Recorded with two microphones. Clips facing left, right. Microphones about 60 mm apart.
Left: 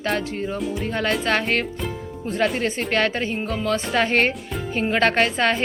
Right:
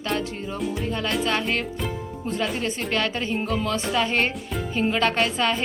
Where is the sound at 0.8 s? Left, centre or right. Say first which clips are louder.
Left 3 dB; left.